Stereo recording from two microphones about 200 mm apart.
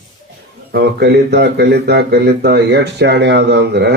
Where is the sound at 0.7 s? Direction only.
55° right (ahead or behind).